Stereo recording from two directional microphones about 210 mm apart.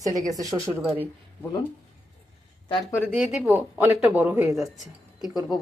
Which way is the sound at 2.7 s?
20° left (ahead or behind).